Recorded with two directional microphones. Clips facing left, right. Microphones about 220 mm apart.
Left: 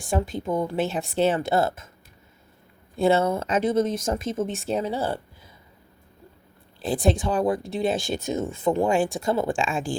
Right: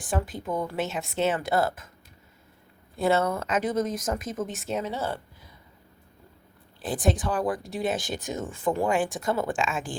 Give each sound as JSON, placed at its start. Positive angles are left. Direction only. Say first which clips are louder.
{"t": 0.0, "sound": "speech", "louder": "left 4 dB", "side_deg": 25}
{"t": 3.0, "sound": "speech", "louder": "left 3 dB", "side_deg": 25}
{"t": 6.8, "sound": "speech", "louder": "left 3 dB", "side_deg": 25}